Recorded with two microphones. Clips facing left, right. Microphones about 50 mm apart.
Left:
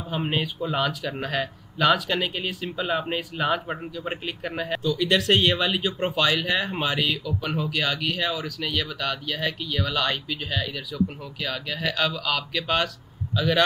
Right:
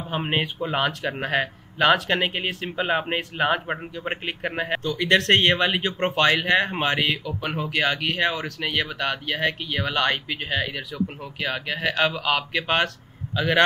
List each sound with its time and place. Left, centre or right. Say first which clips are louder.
0.1 s a man's voice: right 1 dB; right